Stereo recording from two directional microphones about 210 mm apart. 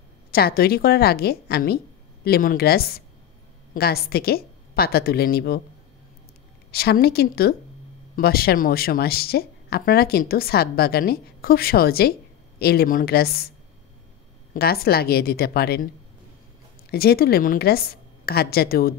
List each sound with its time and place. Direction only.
0.3 s speech: 45° left (ahead or behind)
6.7 s speech: 45° left (ahead or behind)
14.5 s speech: 45° left (ahead or behind)
16.9 s speech: 45° left (ahead or behind)